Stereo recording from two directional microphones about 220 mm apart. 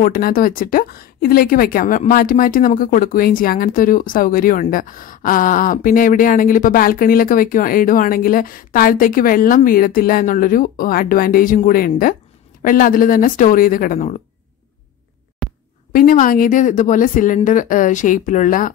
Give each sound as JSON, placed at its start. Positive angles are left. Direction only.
{"t": 0.0, "sound": "a woman's voice", "side_deg": 40}
{"t": 15.4, "sound": "a sound", "side_deg": 0}
{"t": 15.9, "sound": "a woman's voice", "side_deg": 40}